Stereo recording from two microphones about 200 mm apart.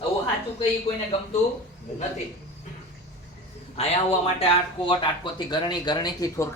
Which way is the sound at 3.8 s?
30° left (ahead or behind).